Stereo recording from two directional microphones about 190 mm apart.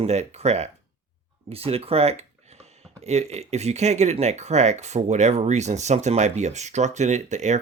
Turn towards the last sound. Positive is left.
turn(degrees=-40)  # may be behind; listen again after turning